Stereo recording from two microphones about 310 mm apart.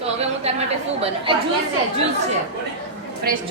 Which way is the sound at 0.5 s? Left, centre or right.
Right.